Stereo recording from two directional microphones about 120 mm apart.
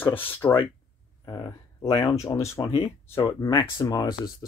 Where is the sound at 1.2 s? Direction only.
35° left (ahead or behind).